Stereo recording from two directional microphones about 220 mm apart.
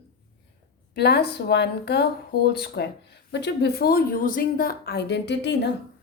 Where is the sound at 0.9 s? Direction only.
50° left (ahead or behind).